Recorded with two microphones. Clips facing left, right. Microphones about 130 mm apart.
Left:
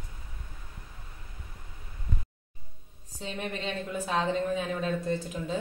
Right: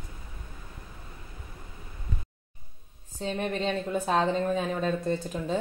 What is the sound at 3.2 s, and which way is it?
A woman's voice, 40° right (ahead or behind).